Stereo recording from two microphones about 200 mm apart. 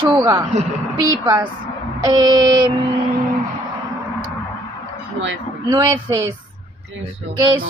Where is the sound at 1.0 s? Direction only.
20° right (ahead or behind).